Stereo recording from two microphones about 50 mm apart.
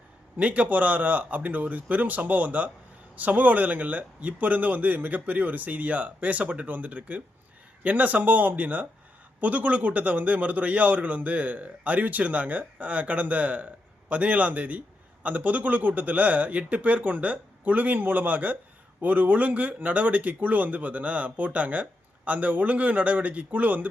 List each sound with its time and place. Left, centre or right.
0.3 s speech: right